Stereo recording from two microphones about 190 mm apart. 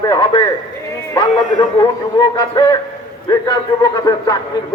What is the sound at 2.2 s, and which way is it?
A man's voice, 20° left (ahead or behind).